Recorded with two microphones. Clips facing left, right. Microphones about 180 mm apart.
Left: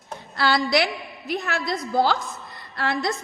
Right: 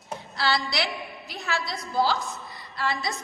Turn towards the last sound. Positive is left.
turn(degrees=55)  # may be behind; listen again after turning